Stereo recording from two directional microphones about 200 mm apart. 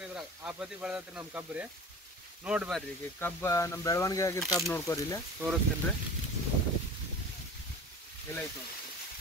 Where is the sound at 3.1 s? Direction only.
10° left (ahead or behind).